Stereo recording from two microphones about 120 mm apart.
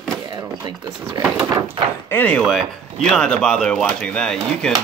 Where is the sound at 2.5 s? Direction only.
Centre (ahead or behind).